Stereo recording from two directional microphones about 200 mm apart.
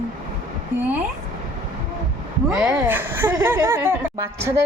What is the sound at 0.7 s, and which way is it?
Speech, 5° right (ahead or behind).